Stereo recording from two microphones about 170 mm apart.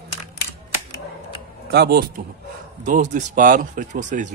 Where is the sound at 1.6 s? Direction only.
70° right (ahead or behind).